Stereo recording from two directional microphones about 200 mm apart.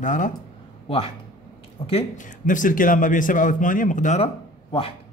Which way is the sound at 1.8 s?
35° left (ahead or behind).